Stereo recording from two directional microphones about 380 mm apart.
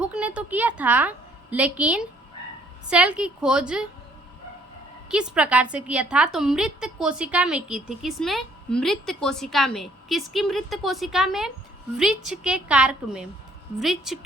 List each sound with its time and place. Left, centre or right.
0.0 s a woman's voice: centre
5.0 s a woman's voice: centre